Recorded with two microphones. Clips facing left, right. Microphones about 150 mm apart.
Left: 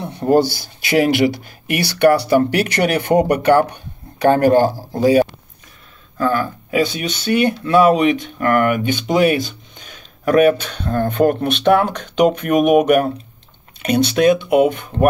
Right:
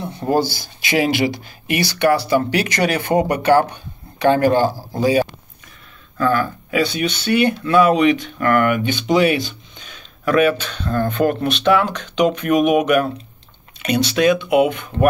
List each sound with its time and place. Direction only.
0.0 s speech: 65° left (ahead or behind)
6.1 s speech: 40° left (ahead or behind)